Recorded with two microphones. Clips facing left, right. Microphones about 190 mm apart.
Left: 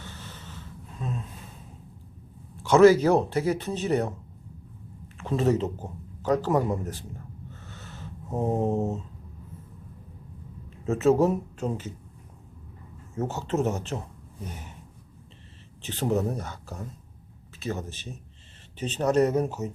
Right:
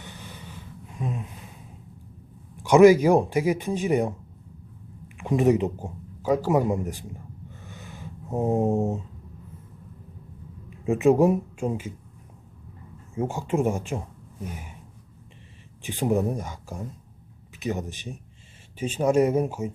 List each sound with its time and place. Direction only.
0.0 s a sound: 15° right (ahead or behind)
2.6 s speech: 15° right (ahead or behind)
5.0 s a sound: 15° right (ahead or behind)
10.8 s speech: 15° right (ahead or behind)
13.1 s speech: 10° right (ahead or behind)
15.8 s speech: 10° right (ahead or behind)